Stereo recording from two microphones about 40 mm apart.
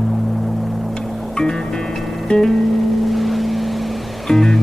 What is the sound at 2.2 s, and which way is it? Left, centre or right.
Music, centre.